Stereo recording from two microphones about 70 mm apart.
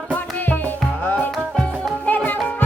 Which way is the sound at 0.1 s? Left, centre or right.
Left.